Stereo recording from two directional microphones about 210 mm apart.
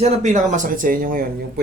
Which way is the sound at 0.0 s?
35° right (ahead or behind).